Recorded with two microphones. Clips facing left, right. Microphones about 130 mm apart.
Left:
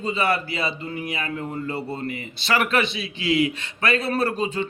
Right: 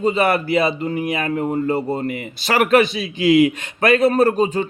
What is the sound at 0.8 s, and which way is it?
Speech, 35° right (ahead or behind).